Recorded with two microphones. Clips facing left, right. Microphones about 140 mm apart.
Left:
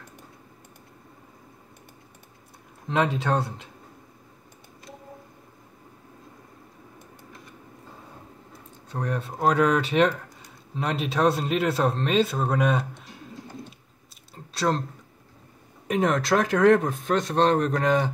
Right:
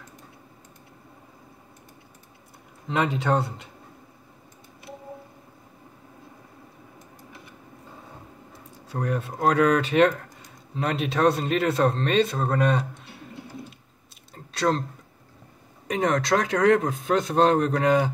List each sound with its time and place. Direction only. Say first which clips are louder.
2.9 s speech: even; centre (ahead or behind)
8.8 s speech: right 2 dB; 5° right (ahead or behind)
13.0 s typing: right 1 dB; 65° right (ahead or behind)
14.3 s a sound: right 1 dB; centre (ahead or behind)
15.9 s speech: even; centre (ahead or behind)